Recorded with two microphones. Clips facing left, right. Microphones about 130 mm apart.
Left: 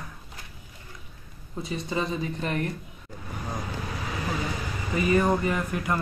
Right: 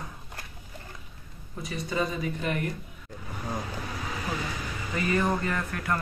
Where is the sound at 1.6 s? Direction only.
25° left (ahead or behind).